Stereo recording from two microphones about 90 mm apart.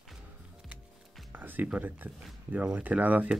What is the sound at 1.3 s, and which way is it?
Speech, 20° right (ahead or behind).